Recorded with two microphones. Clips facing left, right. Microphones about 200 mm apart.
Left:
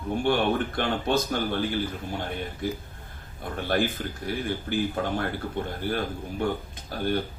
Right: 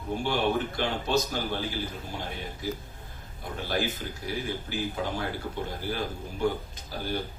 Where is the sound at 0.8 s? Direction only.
55° left (ahead or behind).